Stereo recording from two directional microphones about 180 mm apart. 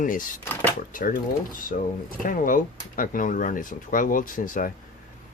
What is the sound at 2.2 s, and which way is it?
Speech, 50° left (ahead or behind).